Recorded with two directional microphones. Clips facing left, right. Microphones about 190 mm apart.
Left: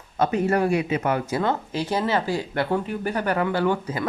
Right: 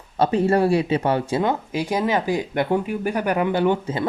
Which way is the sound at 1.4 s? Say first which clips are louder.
Right 2 dB; 15° right (ahead or behind).